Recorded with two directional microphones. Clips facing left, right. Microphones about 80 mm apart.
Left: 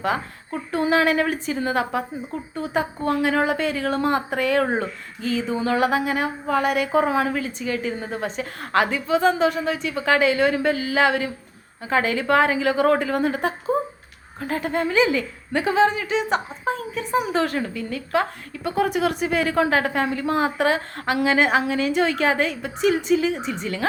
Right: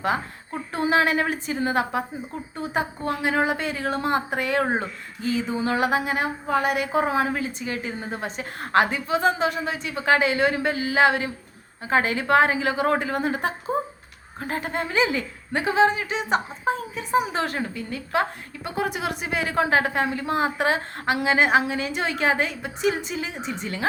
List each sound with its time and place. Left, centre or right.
0.0 s speech: right